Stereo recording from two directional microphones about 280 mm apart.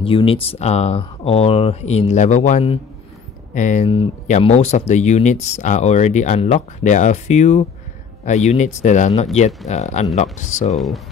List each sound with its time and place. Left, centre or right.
0.0 s speech: centre